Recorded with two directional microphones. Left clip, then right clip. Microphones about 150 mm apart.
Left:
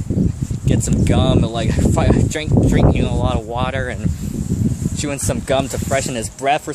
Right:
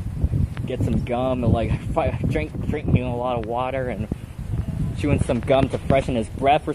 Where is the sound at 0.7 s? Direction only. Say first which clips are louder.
Left 5 dB; 15° left (ahead or behind).